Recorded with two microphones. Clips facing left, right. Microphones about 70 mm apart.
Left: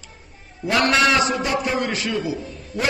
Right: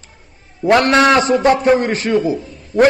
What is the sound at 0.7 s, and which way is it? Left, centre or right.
A man's voice, right.